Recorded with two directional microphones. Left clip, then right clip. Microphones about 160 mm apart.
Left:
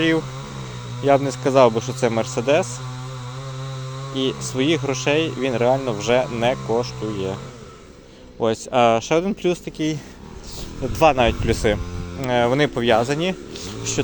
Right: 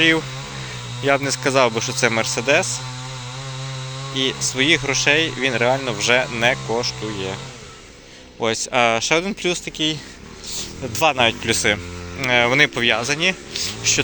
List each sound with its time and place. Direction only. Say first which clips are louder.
1.0 s a man's voice: left 1 dB; 25° left (ahead or behind)
4.1 s a man's voice: right 2 dB; 40° left (ahead or behind)
8.4 s a man's voice: left 1 dB; 40° left (ahead or behind)
11.5 s a man's voice: right 2 dB; 25° left (ahead or behind)